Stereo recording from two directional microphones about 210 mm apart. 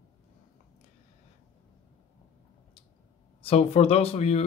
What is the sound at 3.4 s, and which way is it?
Speech, 25° left (ahead or behind).